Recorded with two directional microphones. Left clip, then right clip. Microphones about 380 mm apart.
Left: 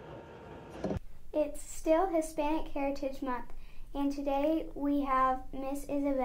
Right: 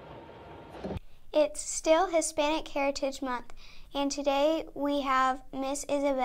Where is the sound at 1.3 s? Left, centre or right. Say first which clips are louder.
Right 6 dB; right.